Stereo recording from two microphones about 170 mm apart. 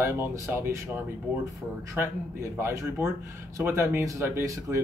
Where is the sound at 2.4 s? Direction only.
15° right (ahead or behind).